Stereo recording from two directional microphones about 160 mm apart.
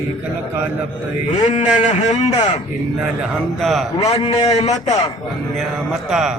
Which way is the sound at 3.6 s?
Centre (ahead or behind).